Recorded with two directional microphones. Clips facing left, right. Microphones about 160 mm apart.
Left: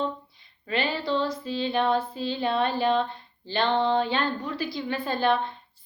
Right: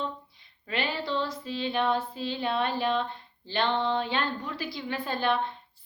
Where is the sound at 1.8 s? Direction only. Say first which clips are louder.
Left 2 dB; 20° left (ahead or behind).